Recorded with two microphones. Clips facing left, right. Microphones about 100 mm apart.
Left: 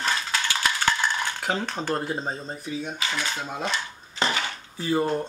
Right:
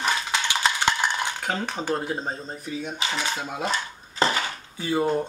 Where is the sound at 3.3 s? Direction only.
5° right (ahead or behind).